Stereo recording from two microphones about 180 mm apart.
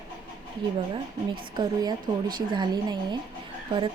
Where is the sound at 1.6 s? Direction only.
25° right (ahead or behind).